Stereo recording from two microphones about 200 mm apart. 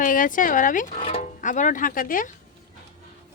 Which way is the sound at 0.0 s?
40° left (ahead or behind).